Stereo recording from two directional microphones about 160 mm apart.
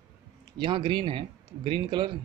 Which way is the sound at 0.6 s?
30° right (ahead or behind).